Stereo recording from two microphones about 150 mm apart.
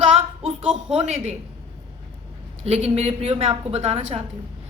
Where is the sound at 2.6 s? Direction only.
45° right (ahead or behind).